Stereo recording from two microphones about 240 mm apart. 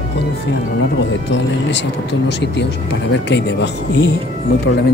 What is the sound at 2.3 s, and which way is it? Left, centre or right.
Speech, left.